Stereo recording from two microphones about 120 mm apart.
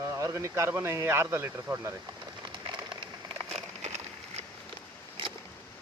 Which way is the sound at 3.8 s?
65° right (ahead or behind).